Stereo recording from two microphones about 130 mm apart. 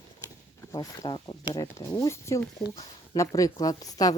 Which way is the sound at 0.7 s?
30° left (ahead or behind).